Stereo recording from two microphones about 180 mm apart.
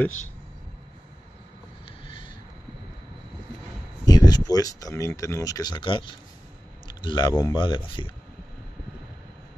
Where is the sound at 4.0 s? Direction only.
20° left (ahead or behind).